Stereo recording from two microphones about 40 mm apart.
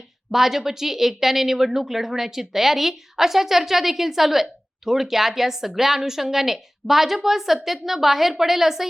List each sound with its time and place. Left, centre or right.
0.3 s a woman's voice: centre